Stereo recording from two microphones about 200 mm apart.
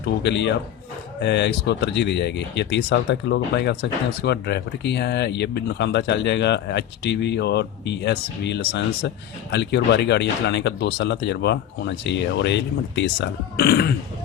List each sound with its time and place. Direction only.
0.2 s speech: 60° left (ahead or behind)